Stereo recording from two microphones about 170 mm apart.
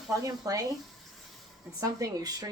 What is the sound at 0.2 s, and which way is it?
Speech, 20° right (ahead or behind).